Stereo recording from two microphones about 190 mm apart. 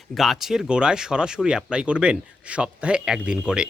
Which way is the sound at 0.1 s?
Centre (ahead or behind).